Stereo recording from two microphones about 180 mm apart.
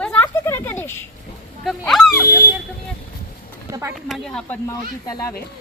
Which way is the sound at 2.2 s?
60° left (ahead or behind).